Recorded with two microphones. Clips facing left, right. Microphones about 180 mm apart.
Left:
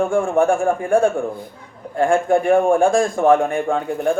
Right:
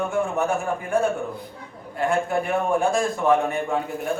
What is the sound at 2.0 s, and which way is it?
A man's voice, 50° left (ahead or behind).